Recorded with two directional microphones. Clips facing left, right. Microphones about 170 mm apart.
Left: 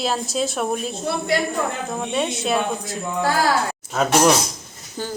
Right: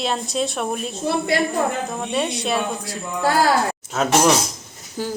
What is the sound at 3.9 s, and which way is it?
A woman's voice, centre (ahead or behind).